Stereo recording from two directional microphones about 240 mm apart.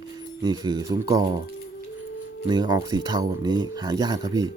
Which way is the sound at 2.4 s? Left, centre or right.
Centre.